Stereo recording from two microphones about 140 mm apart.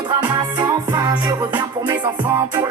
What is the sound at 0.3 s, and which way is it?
Music, 25° right (ahead or behind).